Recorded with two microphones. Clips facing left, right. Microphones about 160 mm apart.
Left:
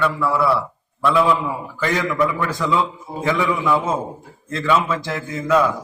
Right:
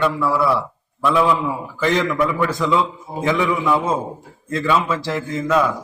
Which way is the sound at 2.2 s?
10° right (ahead or behind).